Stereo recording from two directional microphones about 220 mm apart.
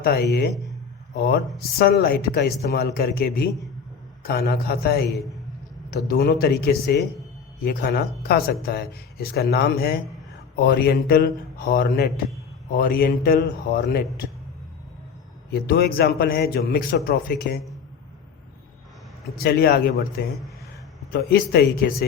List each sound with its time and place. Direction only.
0.0 s a man's voice: 45° left (ahead or behind)
15.4 s a man's voice: 45° left (ahead or behind)
19.4 s a man's voice: 45° left (ahead or behind)
21.1 s a man's voice: 45° left (ahead or behind)